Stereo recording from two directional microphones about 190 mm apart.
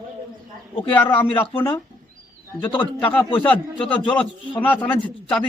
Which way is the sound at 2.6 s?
10° left (ahead or behind).